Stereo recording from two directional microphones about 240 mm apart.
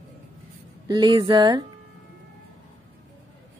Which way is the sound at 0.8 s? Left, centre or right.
Centre.